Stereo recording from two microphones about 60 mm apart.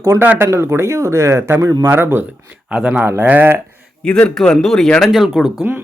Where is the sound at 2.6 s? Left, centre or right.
Centre.